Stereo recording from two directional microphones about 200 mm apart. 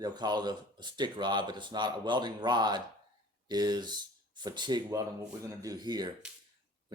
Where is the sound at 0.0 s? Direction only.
20° right (ahead or behind).